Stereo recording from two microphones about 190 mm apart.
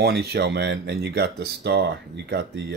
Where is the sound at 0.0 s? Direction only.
55° right (ahead or behind).